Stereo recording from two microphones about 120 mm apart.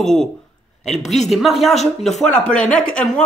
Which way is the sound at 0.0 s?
5° left (ahead or behind).